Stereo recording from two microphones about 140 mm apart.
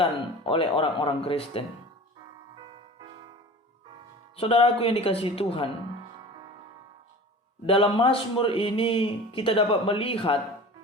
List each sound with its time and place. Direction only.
0.0 s speech: 40° left (ahead or behind)
4.4 s speech: 40° left (ahead or behind)
7.7 s speech: 40° left (ahead or behind)